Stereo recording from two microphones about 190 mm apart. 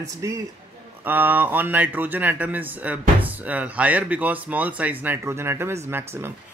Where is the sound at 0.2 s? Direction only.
20° right (ahead or behind).